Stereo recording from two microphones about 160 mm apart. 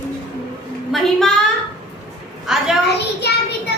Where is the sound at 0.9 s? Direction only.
Centre (ahead or behind).